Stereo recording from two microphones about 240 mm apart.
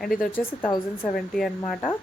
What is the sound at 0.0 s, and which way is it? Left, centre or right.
Speech, centre.